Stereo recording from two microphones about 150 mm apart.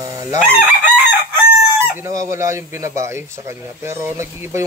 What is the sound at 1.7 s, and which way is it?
Speech, 15° right (ahead or behind).